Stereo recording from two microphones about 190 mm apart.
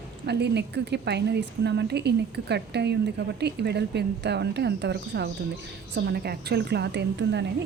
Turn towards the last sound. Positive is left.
turn(degrees=-65)  # may be behind; listen again after turning